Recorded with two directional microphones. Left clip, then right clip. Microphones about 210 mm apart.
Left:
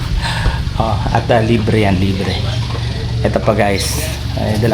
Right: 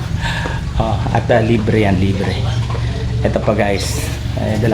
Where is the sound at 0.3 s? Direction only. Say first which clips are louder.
Left 1 dB; 15° left (ahead or behind).